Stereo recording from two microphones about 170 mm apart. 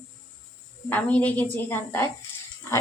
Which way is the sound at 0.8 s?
10° left (ahead or behind).